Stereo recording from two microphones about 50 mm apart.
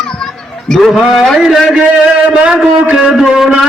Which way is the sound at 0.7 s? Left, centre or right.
Centre.